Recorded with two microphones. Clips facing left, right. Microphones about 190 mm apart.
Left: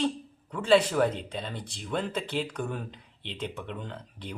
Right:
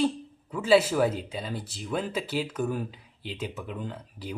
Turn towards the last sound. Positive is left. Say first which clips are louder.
# right 3 dB
turn(degrees=-5)  # may be behind; listen again after turning